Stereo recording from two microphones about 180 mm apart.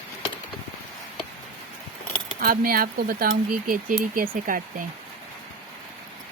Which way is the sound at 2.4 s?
55° right (ahead or behind).